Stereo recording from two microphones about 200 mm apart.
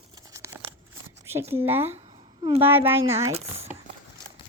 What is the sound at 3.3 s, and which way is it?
Speech, 30° right (ahead or behind).